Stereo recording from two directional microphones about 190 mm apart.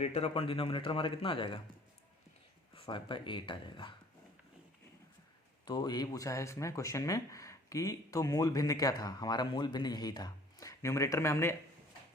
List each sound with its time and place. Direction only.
0.0 s speech: 30° left (ahead or behind)
2.7 s speech: 25° left (ahead or behind)
5.6 s speech: 20° left (ahead or behind)